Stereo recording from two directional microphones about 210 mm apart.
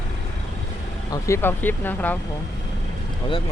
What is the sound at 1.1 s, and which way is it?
Speech, 10° left (ahead or behind).